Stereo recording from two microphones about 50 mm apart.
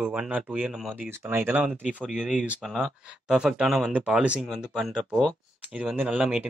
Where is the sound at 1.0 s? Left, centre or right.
Right.